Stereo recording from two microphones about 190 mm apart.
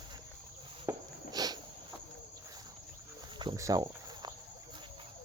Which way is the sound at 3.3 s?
20° right (ahead or behind).